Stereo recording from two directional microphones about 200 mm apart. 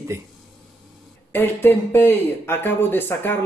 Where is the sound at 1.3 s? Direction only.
10° left (ahead or behind).